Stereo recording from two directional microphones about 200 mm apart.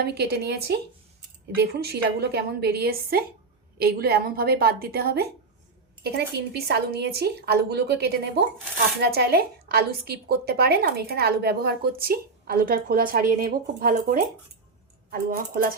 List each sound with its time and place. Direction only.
0.0 s a woman's voice: 55° right (ahead or behind)